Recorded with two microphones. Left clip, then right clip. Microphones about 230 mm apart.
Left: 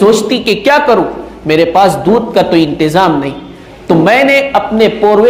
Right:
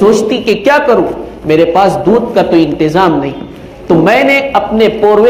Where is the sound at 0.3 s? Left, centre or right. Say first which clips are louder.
Even; left.